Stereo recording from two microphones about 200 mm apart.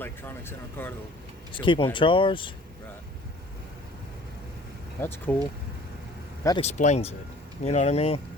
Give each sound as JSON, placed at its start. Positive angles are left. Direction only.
{"t": 0.0, "sound": "speech", "side_deg": 10}
{"t": 1.5, "sound": "speech", "side_deg": 25}
{"t": 4.9, "sound": "speech", "side_deg": 10}
{"t": 6.6, "sound": "speech", "side_deg": 35}